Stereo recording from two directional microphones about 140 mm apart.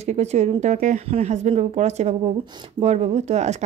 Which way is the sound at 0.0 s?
50° right (ahead or behind).